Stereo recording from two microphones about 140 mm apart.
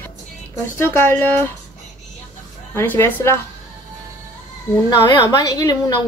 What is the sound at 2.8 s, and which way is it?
Speech, 15° left (ahead or behind).